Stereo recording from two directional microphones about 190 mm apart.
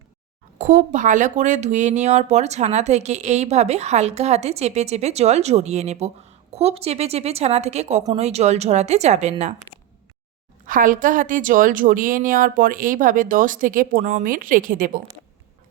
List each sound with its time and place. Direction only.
0.6 s speech: 40° right (ahead or behind)
9.7 s a sound: 15° left (ahead or behind)
10.7 s a woman's voice: 45° right (ahead or behind)